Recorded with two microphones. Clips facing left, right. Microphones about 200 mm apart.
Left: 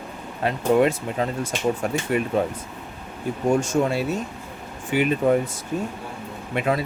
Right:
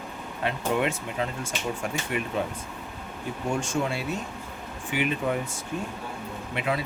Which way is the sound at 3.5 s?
40° left (ahead or behind).